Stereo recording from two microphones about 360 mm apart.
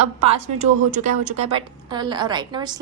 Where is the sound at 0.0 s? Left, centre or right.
Centre.